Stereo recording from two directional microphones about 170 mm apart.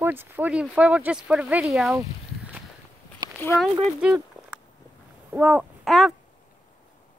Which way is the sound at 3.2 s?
25° right (ahead or behind).